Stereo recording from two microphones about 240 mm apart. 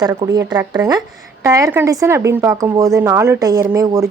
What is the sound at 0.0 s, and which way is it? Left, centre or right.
A woman's voice, centre.